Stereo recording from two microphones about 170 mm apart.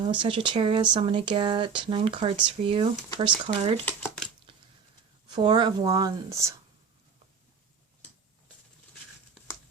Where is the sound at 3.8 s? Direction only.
10° left (ahead or behind).